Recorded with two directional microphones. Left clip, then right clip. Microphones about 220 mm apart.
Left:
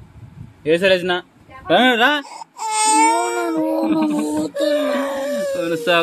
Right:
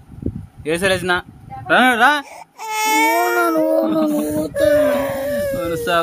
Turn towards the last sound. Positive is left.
turn(degrees=5)  # may be behind; listen again after turning